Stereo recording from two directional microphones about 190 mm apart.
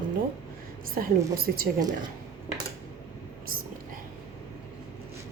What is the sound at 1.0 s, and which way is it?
Speech, 50° right (ahead or behind).